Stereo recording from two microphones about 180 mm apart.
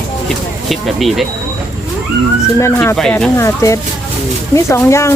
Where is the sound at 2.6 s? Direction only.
15° left (ahead or behind).